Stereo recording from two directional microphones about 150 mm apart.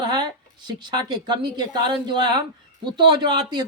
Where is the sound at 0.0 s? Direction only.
30° right (ahead or behind).